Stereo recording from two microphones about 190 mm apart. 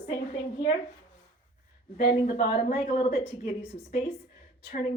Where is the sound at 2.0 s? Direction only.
55° left (ahead or behind).